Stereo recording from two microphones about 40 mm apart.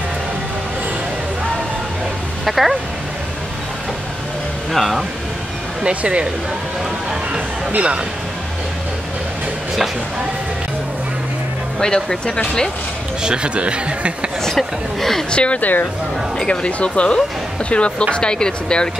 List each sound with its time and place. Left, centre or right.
2.4 s speech: centre
4.7 s speech: centre
5.9 s speech: right
7.7 s speech: right
11.8 s a woman's voice: centre
13.2 s speech: right
14.4 s a woman's voice: centre
15.3 s speech: left
15.6 s speech: left
16.3 s speech: left